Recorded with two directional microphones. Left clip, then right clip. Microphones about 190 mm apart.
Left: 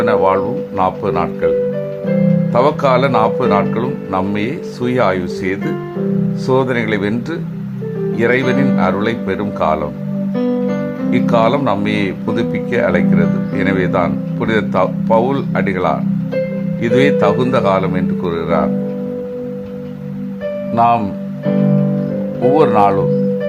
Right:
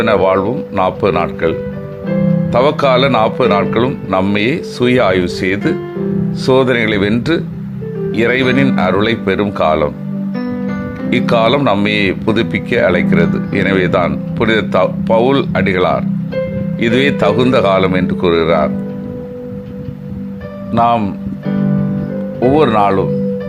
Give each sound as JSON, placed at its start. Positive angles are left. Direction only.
{"t": 0.0, "sound": "speech", "side_deg": -15}
{"t": 10.3, "sound": "music", "side_deg": 10}
{"t": 11.1, "sound": "speech", "side_deg": -20}
{"t": 20.7, "sound": "speech", "side_deg": -15}
{"t": 22.4, "sound": "speech", "side_deg": -10}